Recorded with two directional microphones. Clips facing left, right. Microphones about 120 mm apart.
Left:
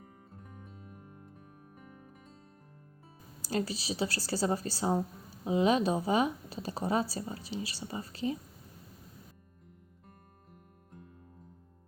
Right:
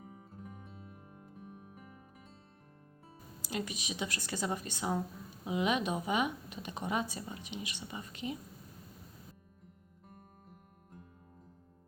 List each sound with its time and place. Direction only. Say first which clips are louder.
0.0 s music: right 3 dB; 5° right (ahead or behind)
3.4 s speech: left 6 dB; 35° left (ahead or behind)